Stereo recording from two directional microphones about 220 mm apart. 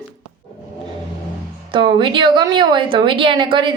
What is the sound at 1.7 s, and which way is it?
A woman's voice, 25° right (ahead or behind).